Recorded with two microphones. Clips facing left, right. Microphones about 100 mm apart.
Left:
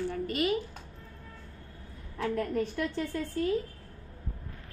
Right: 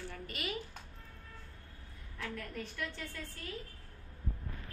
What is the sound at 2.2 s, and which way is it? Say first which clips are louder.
A woman's voice: left 12 dB; 40° left (ahead or behind).